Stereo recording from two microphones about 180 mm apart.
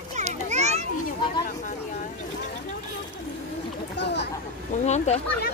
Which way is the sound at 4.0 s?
70° left (ahead or behind).